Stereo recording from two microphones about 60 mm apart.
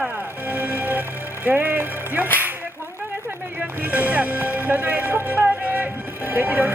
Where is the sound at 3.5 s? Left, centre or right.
Right.